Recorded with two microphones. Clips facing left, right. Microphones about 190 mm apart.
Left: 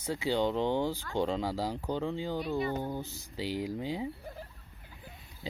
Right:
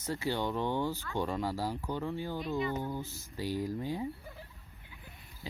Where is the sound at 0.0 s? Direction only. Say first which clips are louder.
Left 4 dB; 15° left (ahead or behind).